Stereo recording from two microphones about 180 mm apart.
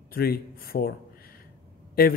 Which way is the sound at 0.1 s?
55° left (ahead or behind).